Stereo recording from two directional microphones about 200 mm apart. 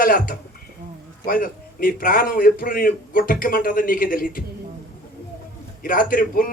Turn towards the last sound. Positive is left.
turn(degrees=45)  # may be behind; listen again after turning